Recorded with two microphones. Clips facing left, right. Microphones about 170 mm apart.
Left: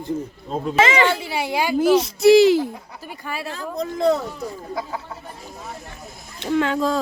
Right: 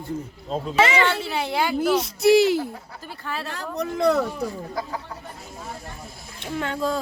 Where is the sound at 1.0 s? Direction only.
15° left (ahead or behind).